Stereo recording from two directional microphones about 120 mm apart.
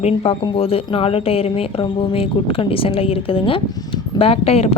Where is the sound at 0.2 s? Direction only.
50° left (ahead or behind).